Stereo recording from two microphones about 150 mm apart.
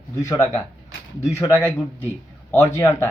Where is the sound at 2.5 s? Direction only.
15° left (ahead or behind).